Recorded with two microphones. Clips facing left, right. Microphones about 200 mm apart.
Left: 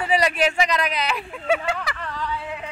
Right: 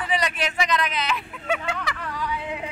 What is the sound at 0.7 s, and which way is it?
Speech, 35° left (ahead or behind).